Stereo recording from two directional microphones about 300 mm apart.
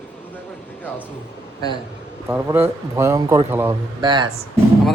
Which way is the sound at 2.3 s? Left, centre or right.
Centre.